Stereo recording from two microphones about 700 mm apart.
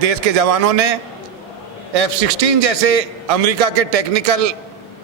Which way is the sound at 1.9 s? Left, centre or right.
Right.